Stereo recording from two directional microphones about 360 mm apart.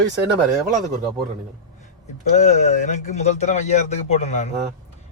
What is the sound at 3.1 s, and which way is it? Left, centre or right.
A man's voice, centre.